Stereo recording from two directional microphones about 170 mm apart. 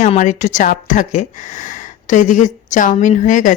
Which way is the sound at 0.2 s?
45° left (ahead or behind).